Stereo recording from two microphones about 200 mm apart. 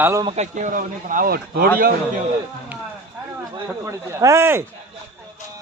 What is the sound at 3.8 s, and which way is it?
Speech, 15° right (ahead or behind).